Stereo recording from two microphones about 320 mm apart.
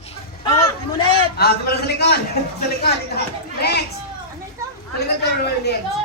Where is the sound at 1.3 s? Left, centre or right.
Left.